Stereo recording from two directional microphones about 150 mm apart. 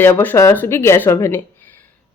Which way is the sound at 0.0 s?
15° left (ahead or behind).